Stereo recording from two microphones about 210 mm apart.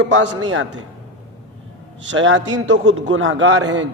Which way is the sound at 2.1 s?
65° right (ahead or behind).